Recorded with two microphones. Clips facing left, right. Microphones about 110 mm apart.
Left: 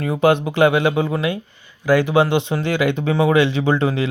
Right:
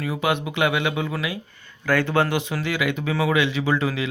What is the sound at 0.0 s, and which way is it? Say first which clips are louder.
Speech: left 8 dB; 30° left (ahead or behind).